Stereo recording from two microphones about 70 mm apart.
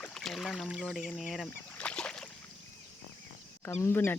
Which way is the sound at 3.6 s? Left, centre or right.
Left.